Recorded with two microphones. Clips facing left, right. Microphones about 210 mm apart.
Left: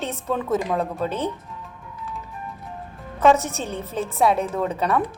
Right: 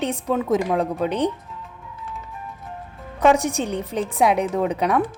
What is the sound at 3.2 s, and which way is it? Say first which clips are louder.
A woman's voice: right 1 dB; 15° right (ahead or behind).